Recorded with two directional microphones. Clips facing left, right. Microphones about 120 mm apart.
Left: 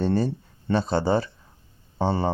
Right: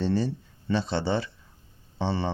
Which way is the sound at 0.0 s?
55° left (ahead or behind).